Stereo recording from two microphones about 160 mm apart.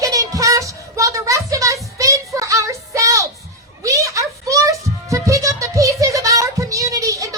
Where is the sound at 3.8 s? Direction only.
20° right (ahead or behind).